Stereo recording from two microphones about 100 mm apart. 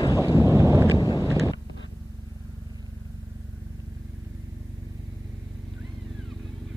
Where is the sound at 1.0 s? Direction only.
40° left (ahead or behind).